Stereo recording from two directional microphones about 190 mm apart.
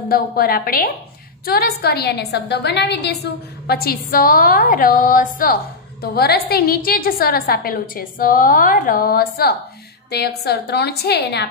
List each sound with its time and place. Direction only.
0.1 s a woman's voice: 50° left (ahead or behind)